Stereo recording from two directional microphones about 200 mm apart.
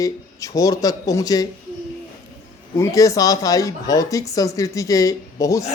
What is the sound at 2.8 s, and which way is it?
Speech, 15° left (ahead or behind).